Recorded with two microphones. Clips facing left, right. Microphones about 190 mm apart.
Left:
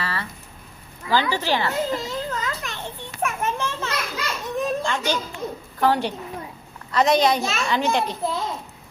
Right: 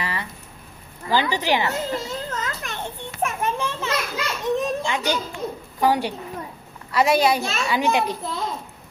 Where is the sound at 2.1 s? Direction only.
50° right (ahead or behind).